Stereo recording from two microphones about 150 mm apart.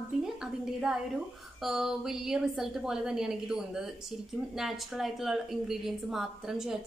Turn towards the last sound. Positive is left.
turn(degrees=-5)  # may be behind; listen again after turning